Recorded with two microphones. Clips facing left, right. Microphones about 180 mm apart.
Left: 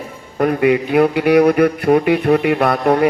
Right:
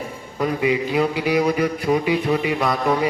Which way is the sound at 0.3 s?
60° left (ahead or behind).